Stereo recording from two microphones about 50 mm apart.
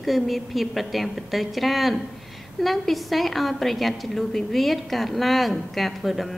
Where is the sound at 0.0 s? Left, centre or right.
Centre.